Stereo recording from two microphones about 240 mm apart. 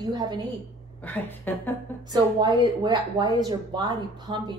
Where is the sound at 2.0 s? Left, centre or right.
Centre.